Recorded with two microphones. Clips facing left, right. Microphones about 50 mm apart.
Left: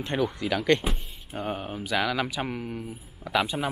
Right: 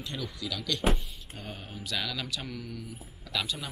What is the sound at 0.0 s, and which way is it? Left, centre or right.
Speech, left.